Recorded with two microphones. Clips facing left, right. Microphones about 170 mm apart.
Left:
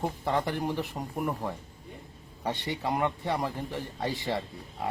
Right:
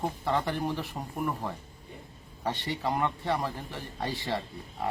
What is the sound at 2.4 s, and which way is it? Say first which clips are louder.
Speech: even; 15° left (ahead or behind).